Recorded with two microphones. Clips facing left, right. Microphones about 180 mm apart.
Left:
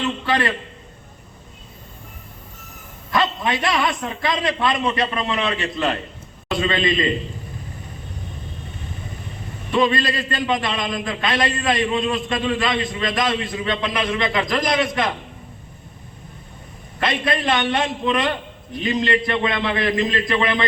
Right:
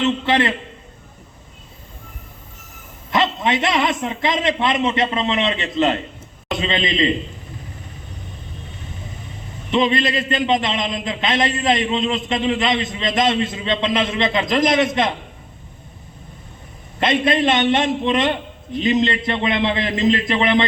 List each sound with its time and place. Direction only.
0.0 s a man's voice: 20° right (ahead or behind)
3.1 s a man's voice: 20° right (ahead or behind)
9.7 s a man's voice: 20° right (ahead or behind)
17.0 s a man's voice: 25° right (ahead or behind)